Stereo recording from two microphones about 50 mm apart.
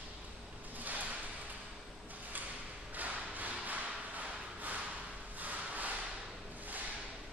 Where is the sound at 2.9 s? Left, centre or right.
Right.